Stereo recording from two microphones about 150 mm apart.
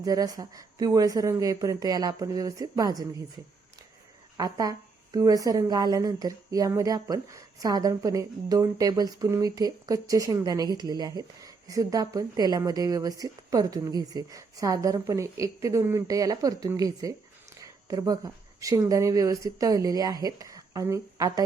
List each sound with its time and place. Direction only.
0.0 s speech: 25° right (ahead or behind)
4.4 s speech: 25° right (ahead or behind)